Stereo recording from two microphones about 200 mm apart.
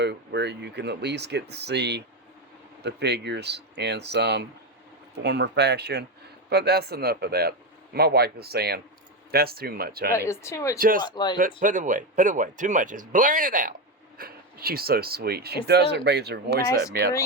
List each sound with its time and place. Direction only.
0.0 s speech: 60° right (ahead or behind)
10.2 s speech: 15° left (ahead or behind)
10.8 s speech: 45° right (ahead or behind)
11.0 s speech: 20° left (ahead or behind)
11.3 s speech: 40° right (ahead or behind)